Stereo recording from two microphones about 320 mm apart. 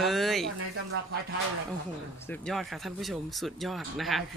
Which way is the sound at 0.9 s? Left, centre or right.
Right.